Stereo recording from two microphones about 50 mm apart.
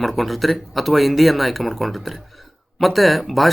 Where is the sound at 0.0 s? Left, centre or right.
Centre.